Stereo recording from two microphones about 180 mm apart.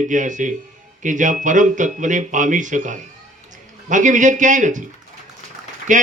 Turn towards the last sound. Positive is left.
turn(degrees=-45)  # may be behind; listen again after turning